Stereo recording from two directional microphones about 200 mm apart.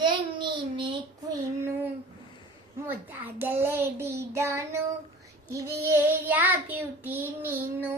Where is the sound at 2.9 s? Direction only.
10° right (ahead or behind).